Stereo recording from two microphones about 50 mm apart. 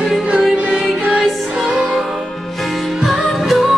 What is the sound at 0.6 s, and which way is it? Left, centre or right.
Music, right.